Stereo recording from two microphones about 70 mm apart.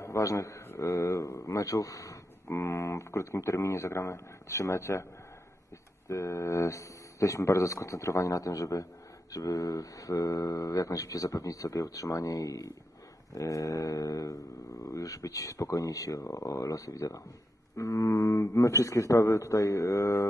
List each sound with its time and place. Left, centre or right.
0.0 s a man's voice: left
2.4 s speech: left
6.0 s speech: left